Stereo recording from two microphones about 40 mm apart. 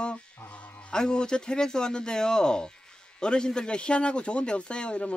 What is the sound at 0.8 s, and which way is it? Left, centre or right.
A man's voice, left.